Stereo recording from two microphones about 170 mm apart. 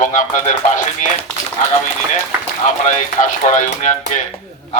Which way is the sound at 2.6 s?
50° left (ahead or behind).